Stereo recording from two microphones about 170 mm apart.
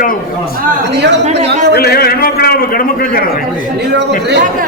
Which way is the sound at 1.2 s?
40° right (ahead or behind).